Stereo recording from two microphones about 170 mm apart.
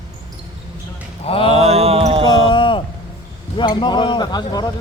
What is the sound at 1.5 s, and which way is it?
Music, 40° right (ahead or behind).